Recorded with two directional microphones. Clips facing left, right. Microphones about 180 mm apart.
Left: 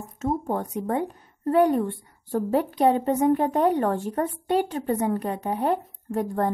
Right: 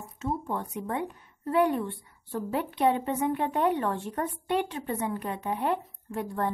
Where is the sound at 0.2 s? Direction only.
40° left (ahead or behind).